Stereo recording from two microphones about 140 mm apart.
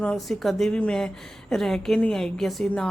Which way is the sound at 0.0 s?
5° left (ahead or behind).